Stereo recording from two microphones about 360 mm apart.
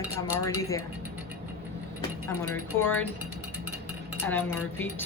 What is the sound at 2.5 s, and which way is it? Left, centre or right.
Speech, centre.